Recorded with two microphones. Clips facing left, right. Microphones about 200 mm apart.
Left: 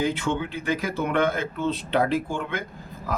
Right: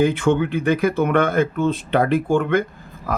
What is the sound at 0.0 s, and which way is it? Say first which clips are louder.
Speech: right 8 dB; 55° right (ahead or behind).